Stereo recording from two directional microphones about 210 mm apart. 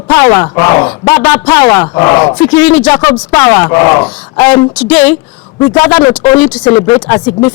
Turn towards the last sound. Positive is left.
turn(degrees=15)  # may be behind; listen again after turning